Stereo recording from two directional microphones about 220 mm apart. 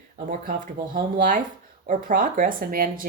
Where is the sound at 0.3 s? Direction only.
40° right (ahead or behind).